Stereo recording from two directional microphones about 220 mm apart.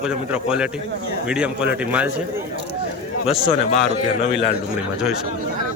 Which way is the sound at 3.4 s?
30° left (ahead or behind).